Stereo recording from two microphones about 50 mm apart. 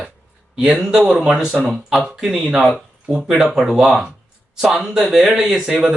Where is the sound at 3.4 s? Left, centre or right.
Centre.